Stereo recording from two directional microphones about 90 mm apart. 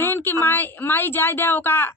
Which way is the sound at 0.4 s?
20° left (ahead or behind).